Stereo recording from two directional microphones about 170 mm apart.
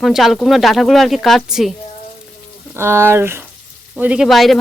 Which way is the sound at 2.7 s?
15° right (ahead or behind).